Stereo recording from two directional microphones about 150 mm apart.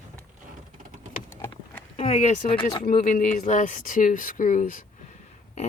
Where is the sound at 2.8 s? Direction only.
65° left (ahead or behind).